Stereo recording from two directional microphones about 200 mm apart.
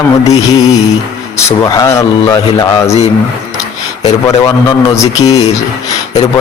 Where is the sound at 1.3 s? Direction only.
15° left (ahead or behind).